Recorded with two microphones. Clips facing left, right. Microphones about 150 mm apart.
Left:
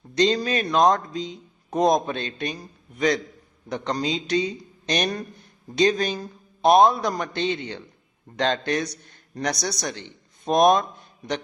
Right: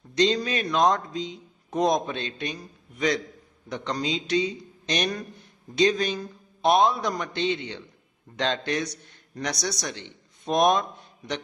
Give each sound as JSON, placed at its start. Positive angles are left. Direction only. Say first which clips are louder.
{"t": 0.2, "sound": "a man's voice", "louder": "left 2 dB", "side_deg": 45}